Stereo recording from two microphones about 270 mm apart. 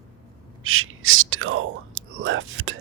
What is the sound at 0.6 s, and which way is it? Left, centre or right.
Whispering, right.